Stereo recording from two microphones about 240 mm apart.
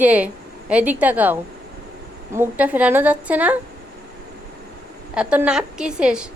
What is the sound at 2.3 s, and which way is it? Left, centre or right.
A woman's voice, centre.